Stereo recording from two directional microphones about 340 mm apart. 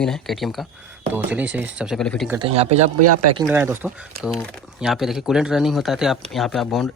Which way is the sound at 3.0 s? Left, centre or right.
Right.